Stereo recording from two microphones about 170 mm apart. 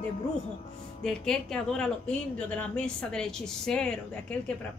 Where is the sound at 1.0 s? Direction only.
5° left (ahead or behind).